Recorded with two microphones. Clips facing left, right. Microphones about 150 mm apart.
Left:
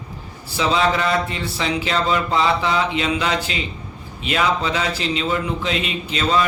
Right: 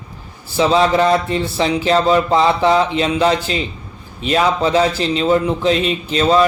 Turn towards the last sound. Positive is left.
turn(degrees=-35)  # may be behind; listen again after turning